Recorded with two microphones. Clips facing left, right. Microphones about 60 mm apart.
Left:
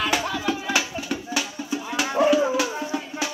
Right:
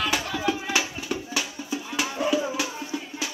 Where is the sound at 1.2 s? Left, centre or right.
Centre.